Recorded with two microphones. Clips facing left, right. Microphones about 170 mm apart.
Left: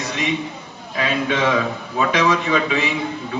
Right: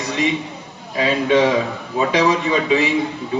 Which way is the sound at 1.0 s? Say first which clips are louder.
Right 5 dB; 30° right (ahead or behind).